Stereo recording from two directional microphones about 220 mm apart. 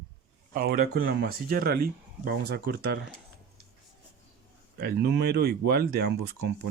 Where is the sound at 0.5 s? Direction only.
40° right (ahead or behind).